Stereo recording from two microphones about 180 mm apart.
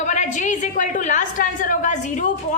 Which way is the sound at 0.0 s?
40° left (ahead or behind).